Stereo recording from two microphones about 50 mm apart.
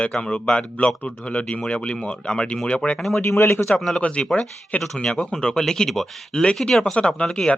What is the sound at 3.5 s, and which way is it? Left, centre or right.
Speech, left.